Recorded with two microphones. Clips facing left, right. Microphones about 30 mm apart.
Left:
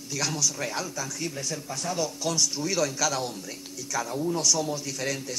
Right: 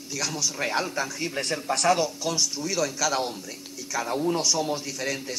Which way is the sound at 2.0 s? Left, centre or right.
Centre.